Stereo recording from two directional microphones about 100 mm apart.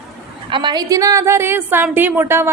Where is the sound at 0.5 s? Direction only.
45° right (ahead or behind).